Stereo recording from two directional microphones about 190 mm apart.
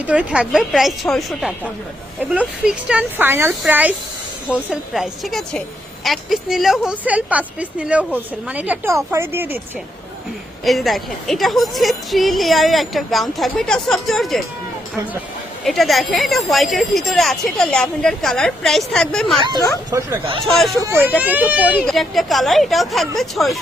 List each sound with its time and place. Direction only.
0.0 s a woman's voice: 5° right (ahead or behind)
10.6 s a woman's voice: centre (ahead or behind)
15.6 s a woman's voice: centre (ahead or behind)
19.5 s speech: 15° left (ahead or behind)
19.9 s speech: 15° right (ahead or behind)
20.4 s a woman's voice: centre (ahead or behind)
20.7 s a woman's voice: 15° right (ahead or behind)